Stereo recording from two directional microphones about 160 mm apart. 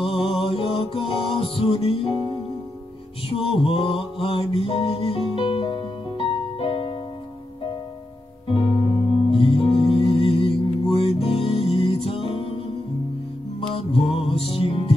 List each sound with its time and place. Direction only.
0.0 s music: 35° left (ahead or behind)
3.3 s mantra: 35° left (ahead or behind)
8.5 s music: 30° left (ahead or behind)
13.6 s music: 35° left (ahead or behind)